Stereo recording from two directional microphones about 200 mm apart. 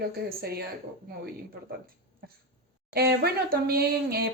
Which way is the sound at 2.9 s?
50° right (ahead or behind).